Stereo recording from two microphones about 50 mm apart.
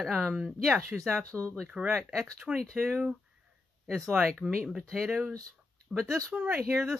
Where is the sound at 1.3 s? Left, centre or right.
Right.